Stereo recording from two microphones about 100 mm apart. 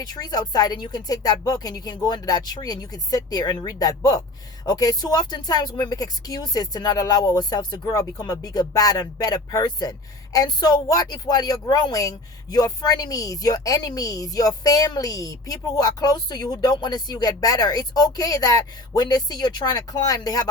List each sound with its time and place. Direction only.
0.0 s a woman's voice: 40° left (ahead or behind)